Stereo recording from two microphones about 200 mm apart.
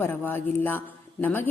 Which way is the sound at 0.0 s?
10° left (ahead or behind).